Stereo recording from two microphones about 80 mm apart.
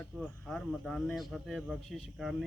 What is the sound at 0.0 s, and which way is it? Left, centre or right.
Speech, centre.